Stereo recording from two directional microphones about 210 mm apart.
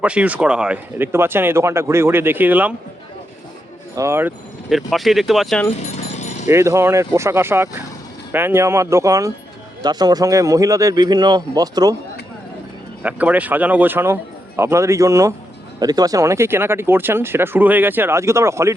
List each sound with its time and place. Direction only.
0.0 s speech: 5° right (ahead or behind)
3.9 s speech: 10° right (ahead or behind)
6.1 s a sound: 30° left (ahead or behind)
6.5 s speech: 15° right (ahead or behind)
13.0 s speech: 5° right (ahead or behind)